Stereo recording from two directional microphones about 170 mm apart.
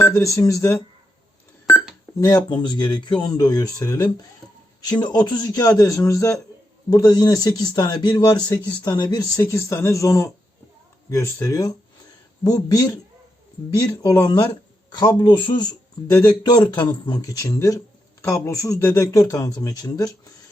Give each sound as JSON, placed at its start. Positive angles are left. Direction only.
{"t": 0.0, "sound": "a man's voice", "side_deg": 20}
{"t": 2.2, "sound": "a man's voice", "side_deg": 25}